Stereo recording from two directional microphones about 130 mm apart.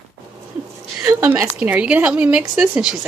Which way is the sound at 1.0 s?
20° right (ahead or behind).